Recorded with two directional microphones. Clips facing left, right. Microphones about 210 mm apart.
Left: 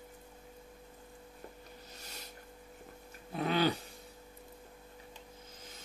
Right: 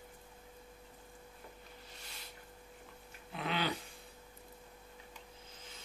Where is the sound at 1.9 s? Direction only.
40° left (ahead or behind).